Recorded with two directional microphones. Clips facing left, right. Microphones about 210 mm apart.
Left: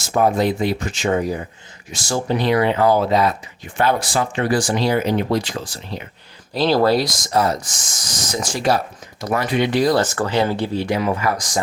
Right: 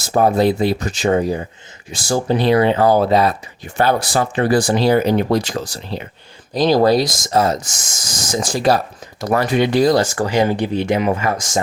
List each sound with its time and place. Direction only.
0.0 s speech: 35° right (ahead or behind)
6.5 s speech: 15° right (ahead or behind)
7.0 s speech: 50° right (ahead or behind)
8.3 s speech: 30° right (ahead or behind)
10.0 s speech: 10° right (ahead or behind)